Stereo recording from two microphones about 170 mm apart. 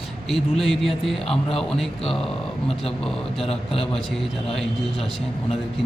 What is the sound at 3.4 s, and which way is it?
Speech, 35° left (ahead or behind).